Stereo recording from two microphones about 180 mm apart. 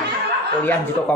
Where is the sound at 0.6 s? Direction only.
10° left (ahead or behind).